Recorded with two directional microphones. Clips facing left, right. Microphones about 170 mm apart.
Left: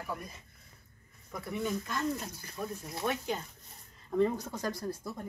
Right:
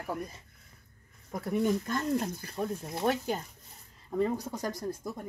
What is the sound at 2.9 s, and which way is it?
Speech, 35° right (ahead or behind).